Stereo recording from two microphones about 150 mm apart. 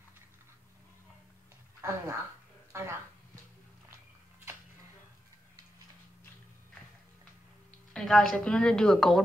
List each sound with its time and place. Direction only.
1.8 s speech: 20° right (ahead or behind)
2.7 s a sound: 15° right (ahead or behind)
7.9 s a woman's voice: 5° left (ahead or behind)